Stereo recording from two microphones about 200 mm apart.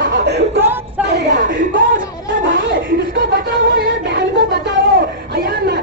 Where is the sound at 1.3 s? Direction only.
40° right (ahead or behind).